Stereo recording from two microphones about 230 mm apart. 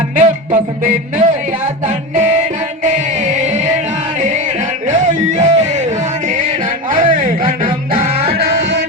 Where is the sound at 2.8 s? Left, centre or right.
Right.